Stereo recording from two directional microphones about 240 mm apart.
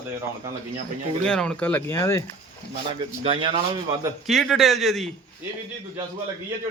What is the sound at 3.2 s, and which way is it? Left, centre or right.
Speech, right.